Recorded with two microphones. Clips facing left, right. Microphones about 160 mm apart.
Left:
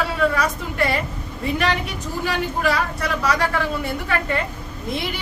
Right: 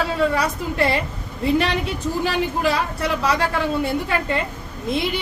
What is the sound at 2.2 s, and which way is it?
Speech, 25° right (ahead or behind).